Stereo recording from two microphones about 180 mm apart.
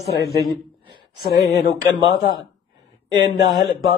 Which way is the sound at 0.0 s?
65° left (ahead or behind).